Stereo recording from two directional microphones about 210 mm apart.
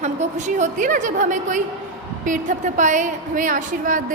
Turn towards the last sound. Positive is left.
turn(degrees=-40)  # may be behind; listen again after turning